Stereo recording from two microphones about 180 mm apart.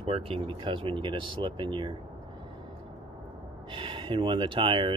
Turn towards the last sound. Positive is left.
turn(degrees=-30)  # may be behind; listen again after turning